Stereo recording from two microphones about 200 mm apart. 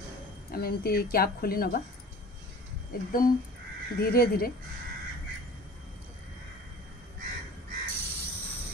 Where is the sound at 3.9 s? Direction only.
50° left (ahead or behind).